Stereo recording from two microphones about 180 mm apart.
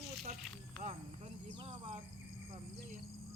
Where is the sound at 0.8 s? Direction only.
35° right (ahead or behind).